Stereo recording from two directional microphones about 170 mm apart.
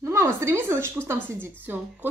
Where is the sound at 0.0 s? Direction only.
15° right (ahead or behind).